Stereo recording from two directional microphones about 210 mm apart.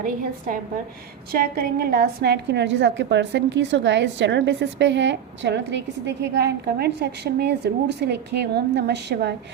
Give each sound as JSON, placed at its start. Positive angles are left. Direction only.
{"t": 0.0, "sound": "a woman's voice", "side_deg": -40}